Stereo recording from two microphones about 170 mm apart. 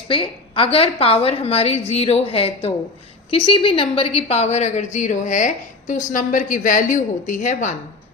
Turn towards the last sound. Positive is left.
turn(degrees=45)  # may be behind; listen again after turning